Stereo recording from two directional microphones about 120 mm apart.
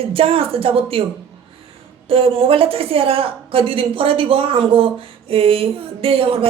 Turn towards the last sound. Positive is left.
turn(degrees=-50)  # may be behind; listen again after turning